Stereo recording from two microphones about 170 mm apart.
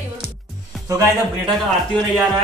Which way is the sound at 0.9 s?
20° right (ahead or behind).